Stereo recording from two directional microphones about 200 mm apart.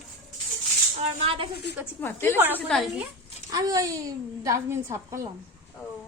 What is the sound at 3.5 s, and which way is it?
A woman's voice, 15° right (ahead or behind).